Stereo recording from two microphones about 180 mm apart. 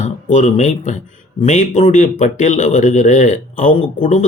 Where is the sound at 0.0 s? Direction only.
40° left (ahead or behind).